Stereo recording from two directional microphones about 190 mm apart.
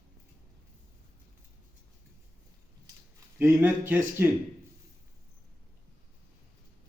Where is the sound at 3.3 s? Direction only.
10° right (ahead or behind).